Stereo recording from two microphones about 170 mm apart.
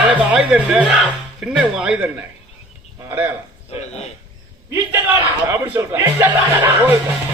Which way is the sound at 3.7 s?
40° left (ahead or behind).